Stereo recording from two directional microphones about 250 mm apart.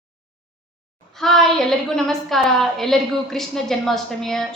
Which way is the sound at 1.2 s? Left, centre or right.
Centre.